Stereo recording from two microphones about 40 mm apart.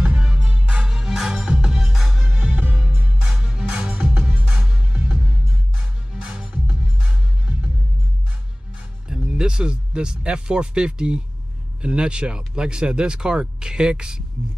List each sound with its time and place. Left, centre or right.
0.0 s music: right
0.8 s music: centre
2.0 s music: centre
2.4 s music: right
3.3 s music: centre
3.9 s music: right
9.1 s speech: centre